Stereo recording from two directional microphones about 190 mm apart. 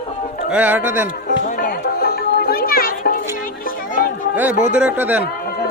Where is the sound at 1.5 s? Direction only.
50° left (ahead or behind).